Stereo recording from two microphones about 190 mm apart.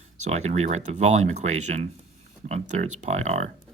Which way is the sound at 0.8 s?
40° right (ahead or behind).